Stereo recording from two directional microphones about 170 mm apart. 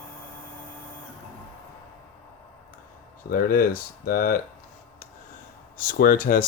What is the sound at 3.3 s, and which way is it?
Speech, 60° left (ahead or behind).